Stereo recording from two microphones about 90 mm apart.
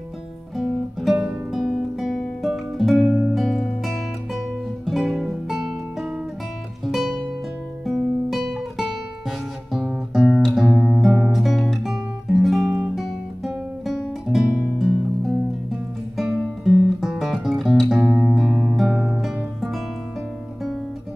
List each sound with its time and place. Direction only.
0.6 s music: centre (ahead or behind)
9.7 s guitar: 5° right (ahead or behind)
11.1 s music: centre (ahead or behind)
16.2 s guitar: centre (ahead or behind)
18.0 s music: 15° right (ahead or behind)
18.3 s music: 5° right (ahead or behind)